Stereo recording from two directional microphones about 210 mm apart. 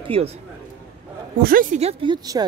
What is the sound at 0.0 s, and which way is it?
Speech, 30° right (ahead or behind).